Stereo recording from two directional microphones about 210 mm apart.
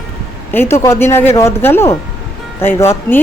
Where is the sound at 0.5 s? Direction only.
10° left (ahead or behind).